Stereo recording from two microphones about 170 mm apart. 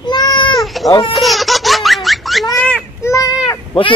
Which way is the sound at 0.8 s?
20° left (ahead or behind).